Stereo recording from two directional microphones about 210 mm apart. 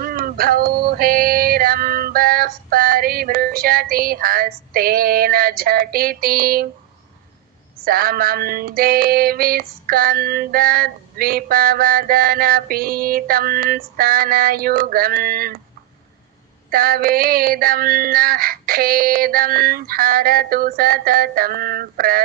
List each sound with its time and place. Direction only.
0.0 s female singing: 45° right (ahead or behind)
7.9 s female singing: 45° right (ahead or behind)
16.6 s female singing: 45° right (ahead or behind)